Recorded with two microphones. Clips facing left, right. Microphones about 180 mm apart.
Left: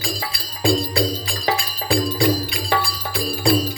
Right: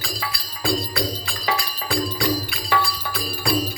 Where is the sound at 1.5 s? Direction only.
25° left (ahead or behind).